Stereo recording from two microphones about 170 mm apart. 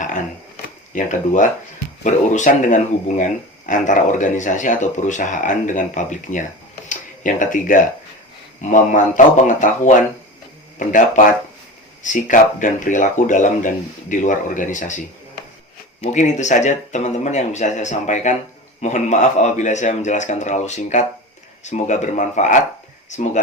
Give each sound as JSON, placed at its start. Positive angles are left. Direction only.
{"t": 0.9, "sound": "speech", "side_deg": 50}